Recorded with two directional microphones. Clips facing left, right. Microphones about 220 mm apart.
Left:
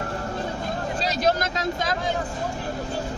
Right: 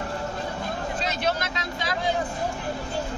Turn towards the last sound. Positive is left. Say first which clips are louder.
# left 5 dB
turn(degrees=45)  # may be behind; listen again after turning